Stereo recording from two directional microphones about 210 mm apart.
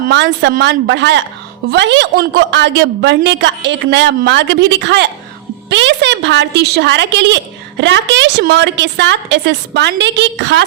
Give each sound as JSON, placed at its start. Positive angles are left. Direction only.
{"t": 0.1, "sound": "a woman's voice", "side_deg": -55}